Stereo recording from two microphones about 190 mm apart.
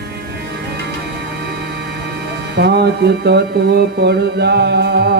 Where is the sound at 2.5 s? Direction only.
60° right (ahead or behind).